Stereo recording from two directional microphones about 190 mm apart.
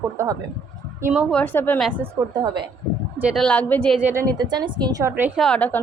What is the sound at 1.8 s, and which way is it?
Speech, 10° right (ahead or behind).